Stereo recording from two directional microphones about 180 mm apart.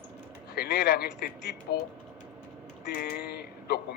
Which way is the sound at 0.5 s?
60° left (ahead or behind).